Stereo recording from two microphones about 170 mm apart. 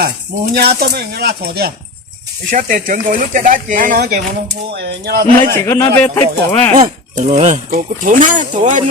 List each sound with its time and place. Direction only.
0.5 s speech: 65° right (ahead or behind)
2.5 s speech: 55° right (ahead or behind)
4.7 s speech: 75° right (ahead or behind)
5.6 s speech: 15° left (ahead or behind)
7.2 s speech: 40° right (ahead or behind)